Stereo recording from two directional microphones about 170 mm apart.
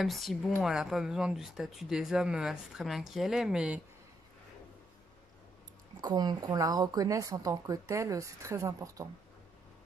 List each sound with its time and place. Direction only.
0.0 s speech: centre (ahead or behind)
5.9 s a woman's voice: 25° right (ahead or behind)